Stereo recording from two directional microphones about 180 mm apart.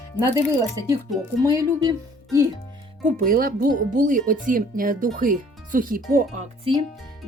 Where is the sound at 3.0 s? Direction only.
50° right (ahead or behind).